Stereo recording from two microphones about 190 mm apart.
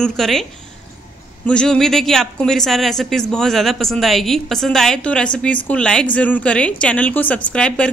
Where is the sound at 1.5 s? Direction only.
5° left (ahead or behind).